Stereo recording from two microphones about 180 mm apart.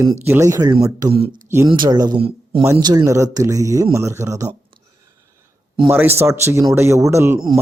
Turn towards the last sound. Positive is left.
turn(degrees=-15)  # may be behind; listen again after turning